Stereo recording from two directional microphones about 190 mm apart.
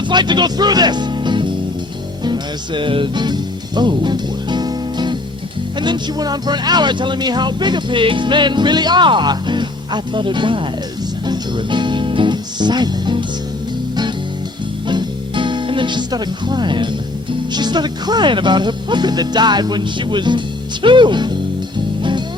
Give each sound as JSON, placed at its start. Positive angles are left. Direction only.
{"t": 0.0, "sound": "speech", "side_deg": -25}
{"t": 2.2, "sound": "music", "side_deg": -25}
{"t": 5.8, "sound": "speech", "side_deg": -20}
{"t": 11.3, "sound": "music", "side_deg": -25}
{"t": 14.8, "sound": "music", "side_deg": -25}
{"t": 17.5, "sound": "speech", "side_deg": -20}